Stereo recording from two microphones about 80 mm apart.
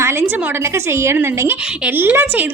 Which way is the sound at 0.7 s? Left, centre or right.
Right.